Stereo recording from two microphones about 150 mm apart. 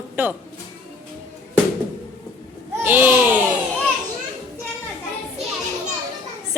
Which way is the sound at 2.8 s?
15° right (ahead or behind).